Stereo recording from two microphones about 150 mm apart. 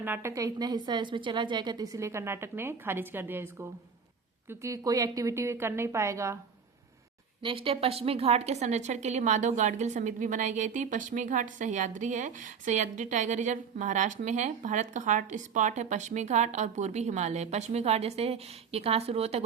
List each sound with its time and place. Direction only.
0.0 s a woman's voice: 15° right (ahead or behind)
7.4 s a woman's voice: 35° right (ahead or behind)